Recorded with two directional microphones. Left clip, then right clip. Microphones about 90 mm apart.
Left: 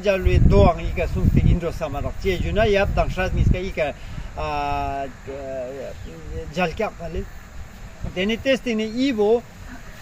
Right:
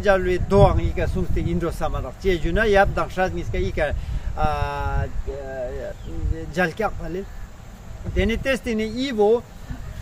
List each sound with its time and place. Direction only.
0.0 s speech: 30° right (ahead or behind)
6.5 s speech: 35° right (ahead or behind)